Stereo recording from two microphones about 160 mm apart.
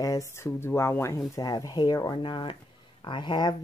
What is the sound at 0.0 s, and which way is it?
Speech, 20° left (ahead or behind).